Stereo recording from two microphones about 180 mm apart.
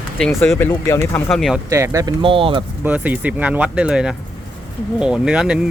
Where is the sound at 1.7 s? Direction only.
15° right (ahead or behind).